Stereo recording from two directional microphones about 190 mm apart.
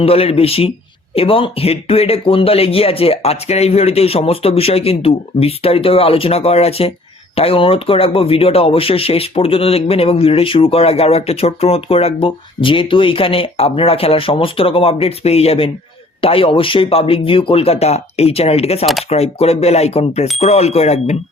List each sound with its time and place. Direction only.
0.0 s speech: 30° left (ahead or behind)